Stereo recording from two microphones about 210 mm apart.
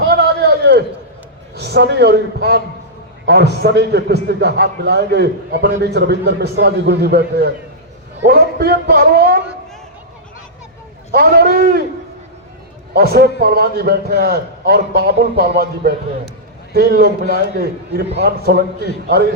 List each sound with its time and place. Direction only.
0.0 s a sound: 50° right (ahead or behind)
1.5 s a man's voice: 50° right (ahead or behind)
11.1 s a man's voice: 45° right (ahead or behind)
12.9 s a man's voice: 45° right (ahead or behind)